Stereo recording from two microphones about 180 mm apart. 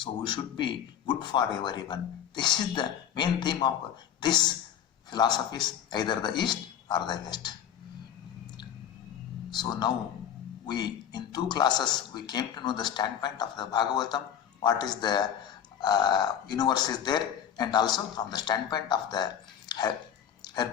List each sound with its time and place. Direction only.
0.0 s a woman's voice: 25° left (ahead or behind)
9.5 s speech: 25° left (ahead or behind)